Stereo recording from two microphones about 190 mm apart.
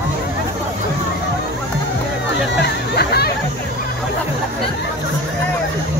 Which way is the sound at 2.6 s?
60° left (ahead or behind).